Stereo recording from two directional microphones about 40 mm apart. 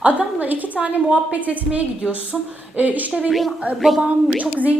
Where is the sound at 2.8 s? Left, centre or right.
Right.